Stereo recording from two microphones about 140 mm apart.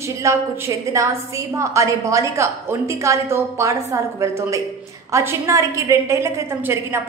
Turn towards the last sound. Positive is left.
turn(degrees=-20)  # may be behind; listen again after turning